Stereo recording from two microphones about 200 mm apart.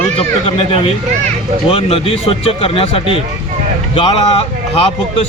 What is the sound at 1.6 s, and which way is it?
Speech, 30° left (ahead or behind).